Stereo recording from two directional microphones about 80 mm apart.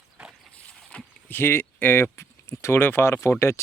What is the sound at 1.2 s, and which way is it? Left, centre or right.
Speech, left.